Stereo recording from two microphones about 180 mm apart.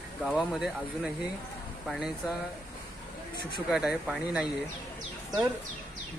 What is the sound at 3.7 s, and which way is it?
Speech, 5° right (ahead or behind).